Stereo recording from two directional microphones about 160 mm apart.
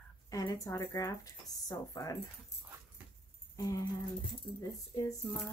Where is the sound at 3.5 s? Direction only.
20° left (ahead or behind).